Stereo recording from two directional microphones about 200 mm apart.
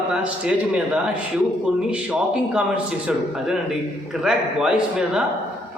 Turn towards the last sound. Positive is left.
turn(degrees=-5)  # may be behind; listen again after turning